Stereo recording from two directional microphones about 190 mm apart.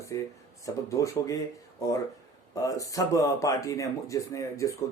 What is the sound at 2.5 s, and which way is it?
Speech, 15° left (ahead or behind).